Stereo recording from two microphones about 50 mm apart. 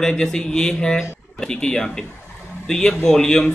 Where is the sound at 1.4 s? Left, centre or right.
Centre.